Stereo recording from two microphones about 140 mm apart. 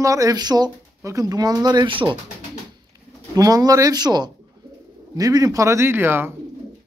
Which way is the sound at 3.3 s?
25° right (ahead or behind).